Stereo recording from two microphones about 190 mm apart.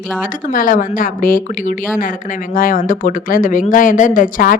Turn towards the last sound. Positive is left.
turn(degrees=45)  # may be behind; listen again after turning